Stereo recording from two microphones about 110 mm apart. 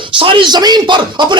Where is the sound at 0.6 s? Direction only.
40° right (ahead or behind).